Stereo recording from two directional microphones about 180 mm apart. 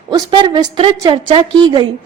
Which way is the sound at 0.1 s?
25° right (ahead or behind).